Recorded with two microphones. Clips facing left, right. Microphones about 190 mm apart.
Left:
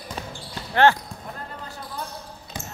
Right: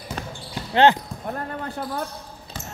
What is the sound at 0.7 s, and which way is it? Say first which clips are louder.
Speech: right 2 dB; 20° right (ahead or behind).